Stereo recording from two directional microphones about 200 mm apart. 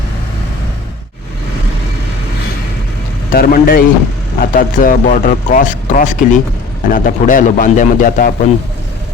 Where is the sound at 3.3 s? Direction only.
45° left (ahead or behind).